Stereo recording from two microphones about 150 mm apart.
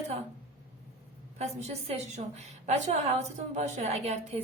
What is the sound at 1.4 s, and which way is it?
A woman's voice, 45° right (ahead or behind).